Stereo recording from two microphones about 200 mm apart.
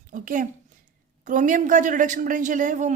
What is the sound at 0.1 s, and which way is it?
A woman's voice, 40° right (ahead or behind).